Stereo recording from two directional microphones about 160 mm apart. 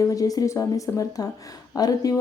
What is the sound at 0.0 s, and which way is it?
A woman's voice, 20° left (ahead or behind).